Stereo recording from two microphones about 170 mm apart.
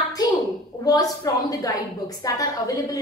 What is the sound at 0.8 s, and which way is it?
A woman's voice, 20° left (ahead or behind).